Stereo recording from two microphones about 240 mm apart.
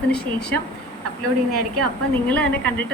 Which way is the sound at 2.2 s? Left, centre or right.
Centre.